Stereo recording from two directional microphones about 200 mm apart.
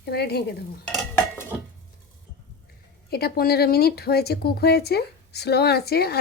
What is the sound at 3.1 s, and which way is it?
Speech, 50° left (ahead or behind).